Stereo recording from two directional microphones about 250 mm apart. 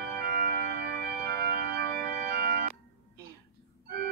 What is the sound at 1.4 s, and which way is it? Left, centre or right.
Organ, right.